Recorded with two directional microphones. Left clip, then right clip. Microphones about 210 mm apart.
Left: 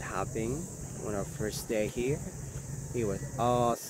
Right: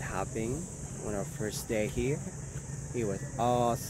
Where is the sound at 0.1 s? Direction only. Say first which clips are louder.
Left 1 dB; centre (ahead or behind).